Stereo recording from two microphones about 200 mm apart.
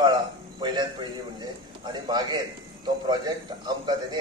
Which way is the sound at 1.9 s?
20° right (ahead or behind).